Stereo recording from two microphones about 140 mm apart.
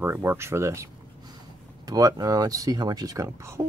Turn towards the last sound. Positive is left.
turn(degrees=-25)  # may be behind; listen again after turning